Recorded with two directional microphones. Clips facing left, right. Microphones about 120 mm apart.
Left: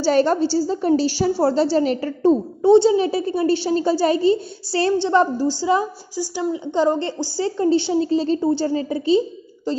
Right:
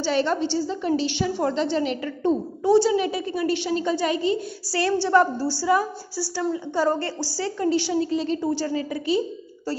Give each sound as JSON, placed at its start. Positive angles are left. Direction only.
{"t": 0.0, "sound": "a woman's voice", "side_deg": 40}
{"t": 2.7, "sound": "a woman's voice", "side_deg": 25}